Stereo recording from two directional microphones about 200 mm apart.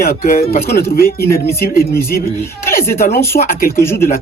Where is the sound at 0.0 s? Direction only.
50° left (ahead or behind).